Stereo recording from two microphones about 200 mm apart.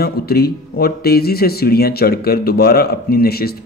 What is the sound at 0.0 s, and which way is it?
Speech, 50° left (ahead or behind).